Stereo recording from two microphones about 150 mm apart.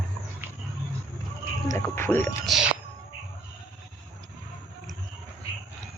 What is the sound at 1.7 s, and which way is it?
Speech, 15° left (ahead or behind).